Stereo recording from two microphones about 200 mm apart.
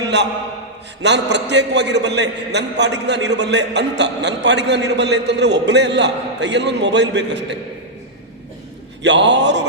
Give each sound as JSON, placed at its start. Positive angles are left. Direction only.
{"t": 0.1, "sound": "a man's voice", "side_deg": -60}
{"t": 9.0, "sound": "a man's voice", "side_deg": -60}